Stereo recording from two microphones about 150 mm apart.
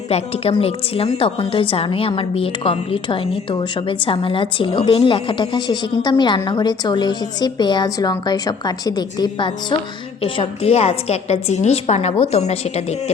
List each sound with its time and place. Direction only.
0.1 s a woman's voice: 40° left (ahead or behind)